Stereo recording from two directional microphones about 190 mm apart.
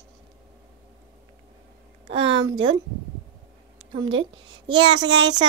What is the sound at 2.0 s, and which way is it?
Speech, 25° right (ahead or behind).